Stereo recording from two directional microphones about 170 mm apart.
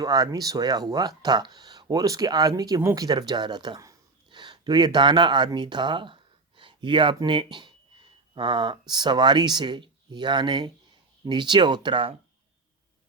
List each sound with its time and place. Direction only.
0.0 s speech: 20° right (ahead or behind)